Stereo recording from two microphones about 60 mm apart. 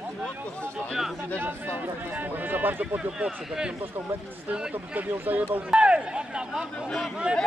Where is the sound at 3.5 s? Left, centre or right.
Centre.